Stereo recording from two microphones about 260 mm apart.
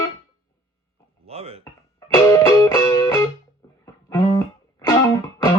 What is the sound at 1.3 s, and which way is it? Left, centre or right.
Speech, right.